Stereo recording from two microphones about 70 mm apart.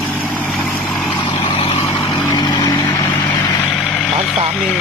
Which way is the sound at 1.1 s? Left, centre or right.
Left.